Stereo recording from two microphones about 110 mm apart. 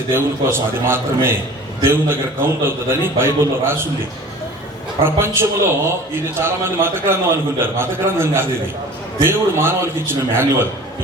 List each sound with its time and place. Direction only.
0.1 s a man's voice: 20° right (ahead or behind)
5.0 s a man's voice: 20° right (ahead or behind)